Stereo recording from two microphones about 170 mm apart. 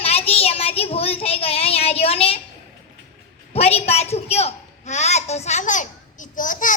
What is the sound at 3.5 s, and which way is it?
A woman's voice, 35° left (ahead or behind).